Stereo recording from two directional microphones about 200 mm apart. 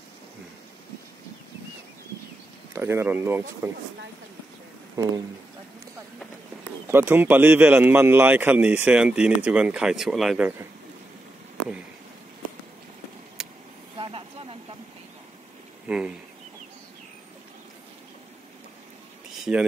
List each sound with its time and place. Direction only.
2.7 s a man's voice: 10° right (ahead or behind)
6.9 s a man's voice: 10° right (ahead or behind)
13.4 s vehicle: 5° right (ahead or behind)
13.9 s vehicle: 25° right (ahead or behind)
15.9 s speech: 5° right (ahead or behind)
19.3 s a sound: centre (ahead or behind)